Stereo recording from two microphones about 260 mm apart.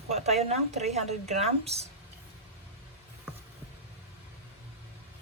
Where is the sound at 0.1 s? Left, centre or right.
Right.